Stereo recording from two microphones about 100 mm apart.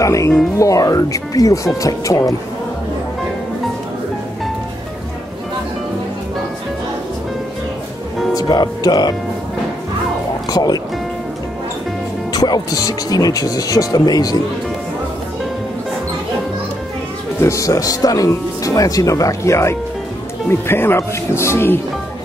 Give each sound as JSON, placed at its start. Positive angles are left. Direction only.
{"t": 0.0, "sound": "speech", "side_deg": 30}
{"t": 8.4, "sound": "speech", "side_deg": 40}
{"t": 10.5, "sound": "speech", "side_deg": 40}
{"t": 12.3, "sound": "speech", "side_deg": 40}
{"t": 17.4, "sound": "speech", "side_deg": 30}